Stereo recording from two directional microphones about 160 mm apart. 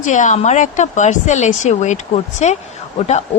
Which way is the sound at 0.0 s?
50° left (ahead or behind).